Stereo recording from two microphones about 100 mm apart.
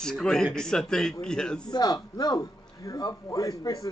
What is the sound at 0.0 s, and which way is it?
A man's voice, 5° left (ahead or behind).